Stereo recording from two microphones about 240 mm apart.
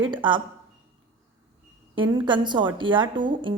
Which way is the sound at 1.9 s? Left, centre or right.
Centre.